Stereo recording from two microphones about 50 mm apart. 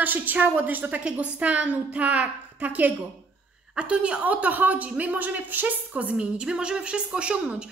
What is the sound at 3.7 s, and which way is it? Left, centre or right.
A woman's voice, right.